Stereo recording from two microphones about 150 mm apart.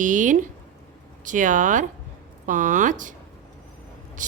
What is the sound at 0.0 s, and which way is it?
A woman's voice, 60° right (ahead or behind).